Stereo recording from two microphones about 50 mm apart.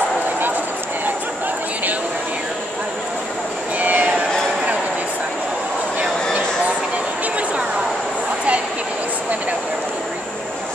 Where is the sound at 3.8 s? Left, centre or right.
Right.